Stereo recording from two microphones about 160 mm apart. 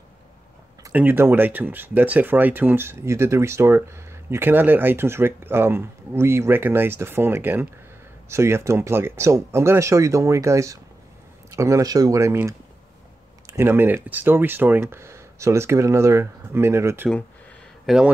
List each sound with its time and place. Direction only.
0.9 s speech: 15° right (ahead or behind)
17.8 s speech: 5° right (ahead or behind)